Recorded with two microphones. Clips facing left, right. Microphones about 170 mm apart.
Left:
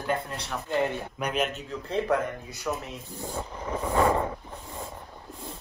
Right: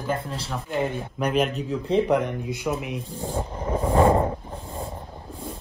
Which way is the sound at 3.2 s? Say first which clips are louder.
Right 4 dB; 30° right (ahead or behind).